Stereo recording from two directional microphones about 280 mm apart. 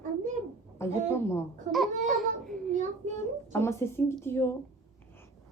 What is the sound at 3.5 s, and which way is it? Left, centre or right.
Speech, centre.